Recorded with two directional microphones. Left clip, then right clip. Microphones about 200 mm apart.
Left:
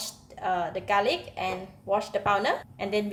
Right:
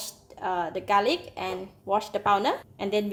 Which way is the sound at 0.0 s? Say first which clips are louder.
Left 1 dB; 30° right (ahead or behind).